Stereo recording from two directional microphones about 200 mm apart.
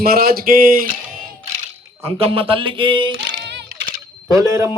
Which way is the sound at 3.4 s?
60° right (ahead or behind).